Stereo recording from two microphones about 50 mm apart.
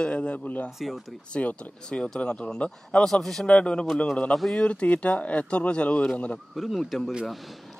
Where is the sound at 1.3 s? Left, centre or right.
Left.